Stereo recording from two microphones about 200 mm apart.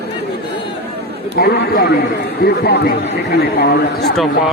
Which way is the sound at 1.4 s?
50° left (ahead or behind).